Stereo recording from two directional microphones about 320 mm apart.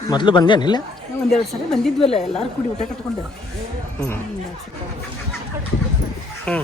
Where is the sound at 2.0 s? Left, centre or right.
Centre.